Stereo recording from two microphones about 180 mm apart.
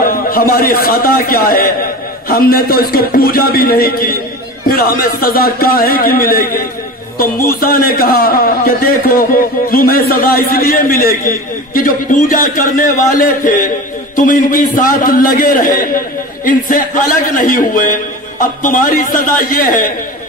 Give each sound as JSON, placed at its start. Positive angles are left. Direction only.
{"t": 0.0, "sound": "a man's voice", "side_deg": 55}